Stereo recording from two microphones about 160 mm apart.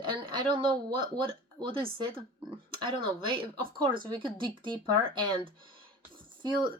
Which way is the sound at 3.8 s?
30° right (ahead or behind).